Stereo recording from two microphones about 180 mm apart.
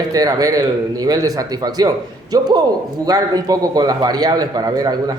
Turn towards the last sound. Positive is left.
turn(degrees=-20)  # may be behind; listen again after turning